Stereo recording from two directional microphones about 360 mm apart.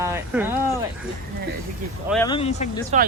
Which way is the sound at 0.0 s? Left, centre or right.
Centre.